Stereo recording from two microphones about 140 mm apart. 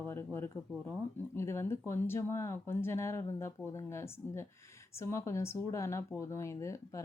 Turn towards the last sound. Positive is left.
turn(degrees=20)  # may be behind; listen again after turning